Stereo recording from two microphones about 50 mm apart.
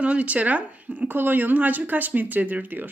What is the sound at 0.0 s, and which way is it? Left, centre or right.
Speech, right.